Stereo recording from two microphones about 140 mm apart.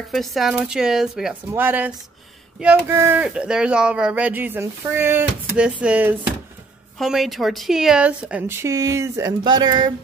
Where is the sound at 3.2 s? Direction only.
5° right (ahead or behind).